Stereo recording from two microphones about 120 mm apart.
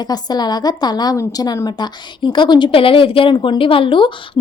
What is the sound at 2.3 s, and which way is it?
Speech, 40° left (ahead or behind).